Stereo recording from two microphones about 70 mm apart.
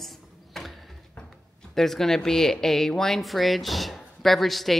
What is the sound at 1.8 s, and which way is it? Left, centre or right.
Speech, centre.